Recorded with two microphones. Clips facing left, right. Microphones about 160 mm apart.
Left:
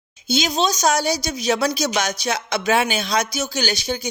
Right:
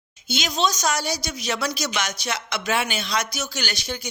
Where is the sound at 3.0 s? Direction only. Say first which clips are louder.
Left 5 dB; 40° left (ahead or behind).